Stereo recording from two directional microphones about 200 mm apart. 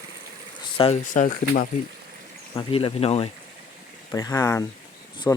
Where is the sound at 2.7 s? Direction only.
30° left (ahead or behind).